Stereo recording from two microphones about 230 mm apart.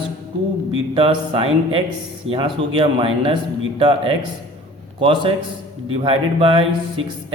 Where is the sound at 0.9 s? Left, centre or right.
Right.